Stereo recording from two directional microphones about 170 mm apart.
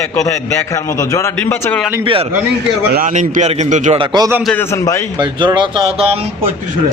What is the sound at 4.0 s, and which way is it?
Speech, 25° right (ahead or behind).